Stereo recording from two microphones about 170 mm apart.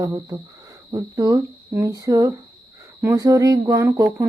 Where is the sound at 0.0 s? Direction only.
20° right (ahead or behind).